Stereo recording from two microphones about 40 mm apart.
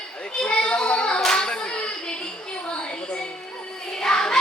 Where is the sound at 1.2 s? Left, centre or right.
Left.